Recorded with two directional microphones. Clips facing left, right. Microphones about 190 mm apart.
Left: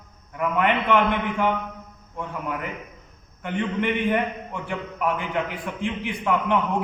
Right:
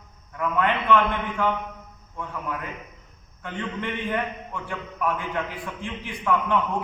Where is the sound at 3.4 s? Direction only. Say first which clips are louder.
Left 6 dB; 20° left (ahead or behind).